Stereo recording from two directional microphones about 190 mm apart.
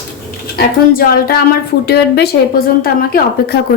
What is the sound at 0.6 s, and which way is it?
A woman's voice, 50° left (ahead or behind).